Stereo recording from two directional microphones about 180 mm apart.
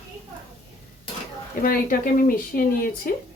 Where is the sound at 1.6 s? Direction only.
50° left (ahead or behind).